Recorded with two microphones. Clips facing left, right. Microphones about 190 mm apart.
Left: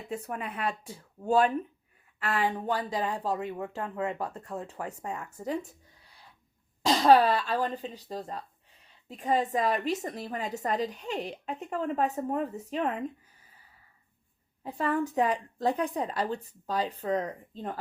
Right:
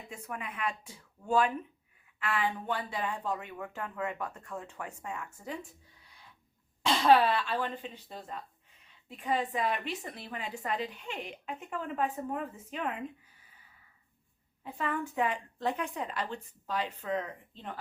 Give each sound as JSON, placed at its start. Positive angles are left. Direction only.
{"t": 0.1, "sound": "a woman's voice", "side_deg": 35}
{"t": 6.8, "sound": "a woman's voice", "side_deg": 40}
{"t": 14.6, "sound": "a woman's voice", "side_deg": 40}